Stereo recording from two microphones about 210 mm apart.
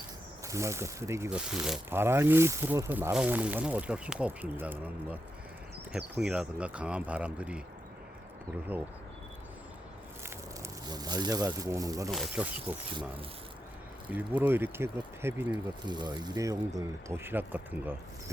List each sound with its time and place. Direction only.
0.4 s speech: 15° right (ahead or behind)
5.9 s speech: 5° right (ahead or behind)
10.2 s speech: 15° right (ahead or behind)
12.1 s speech: centre (ahead or behind)
14.1 s speech: 5° right (ahead or behind)